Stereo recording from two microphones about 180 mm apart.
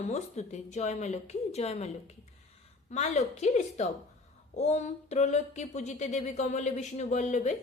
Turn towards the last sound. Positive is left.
turn(degrees=40)  # may be behind; listen again after turning